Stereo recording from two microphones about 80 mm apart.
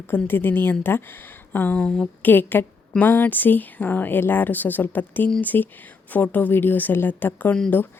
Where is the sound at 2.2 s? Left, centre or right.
Left.